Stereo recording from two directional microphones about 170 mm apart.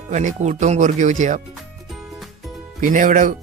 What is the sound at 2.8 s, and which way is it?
Speech, 50° right (ahead or behind).